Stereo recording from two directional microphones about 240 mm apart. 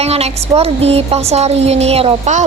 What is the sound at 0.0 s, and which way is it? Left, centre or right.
A woman's voice, right.